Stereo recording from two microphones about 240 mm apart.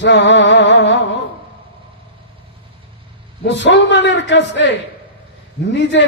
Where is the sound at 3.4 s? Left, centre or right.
Left.